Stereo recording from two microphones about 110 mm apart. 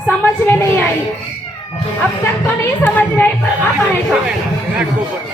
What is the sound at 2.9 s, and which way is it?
Speech, 15° left (ahead or behind).